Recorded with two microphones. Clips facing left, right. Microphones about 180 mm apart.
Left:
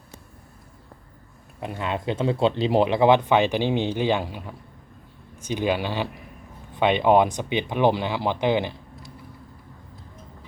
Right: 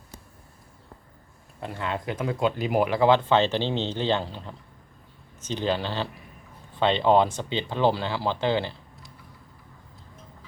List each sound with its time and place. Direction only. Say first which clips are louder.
1.6 s speech: left 3 dB; 20° left (ahead or behind)